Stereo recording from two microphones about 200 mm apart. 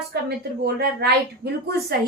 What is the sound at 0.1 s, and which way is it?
A woman's voice, 50° right (ahead or behind).